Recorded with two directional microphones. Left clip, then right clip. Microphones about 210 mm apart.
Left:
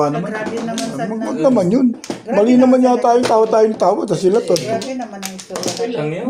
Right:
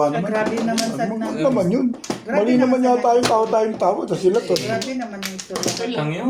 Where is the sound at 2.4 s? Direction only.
45° left (ahead or behind).